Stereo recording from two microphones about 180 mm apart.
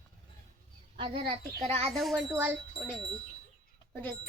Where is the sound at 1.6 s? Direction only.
35° right (ahead or behind).